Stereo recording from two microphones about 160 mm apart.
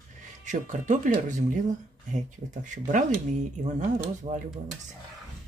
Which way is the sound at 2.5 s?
50° right (ahead or behind).